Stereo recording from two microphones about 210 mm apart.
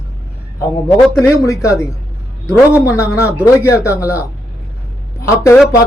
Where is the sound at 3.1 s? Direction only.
5° right (ahead or behind).